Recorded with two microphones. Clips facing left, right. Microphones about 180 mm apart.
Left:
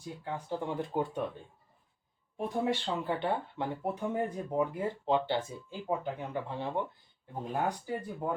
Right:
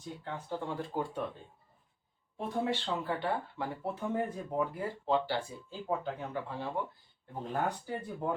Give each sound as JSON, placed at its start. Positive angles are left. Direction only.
{"t": 0.0, "sound": "speech", "side_deg": 10}
{"t": 2.4, "sound": "speech", "side_deg": 15}
{"t": 7.3, "sound": "speech", "side_deg": 10}